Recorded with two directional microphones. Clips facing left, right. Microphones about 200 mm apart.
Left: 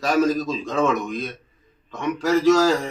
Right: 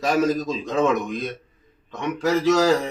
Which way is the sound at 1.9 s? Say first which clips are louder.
Left 1 dB; 20° right (ahead or behind).